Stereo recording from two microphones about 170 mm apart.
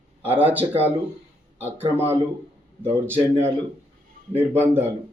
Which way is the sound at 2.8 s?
15° right (ahead or behind).